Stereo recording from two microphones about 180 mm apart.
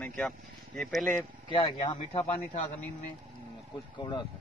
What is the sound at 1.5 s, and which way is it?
Speech, 25° left (ahead or behind).